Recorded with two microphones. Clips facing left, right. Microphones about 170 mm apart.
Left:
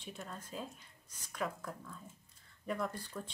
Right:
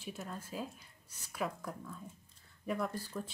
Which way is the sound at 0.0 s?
5° right (ahead or behind).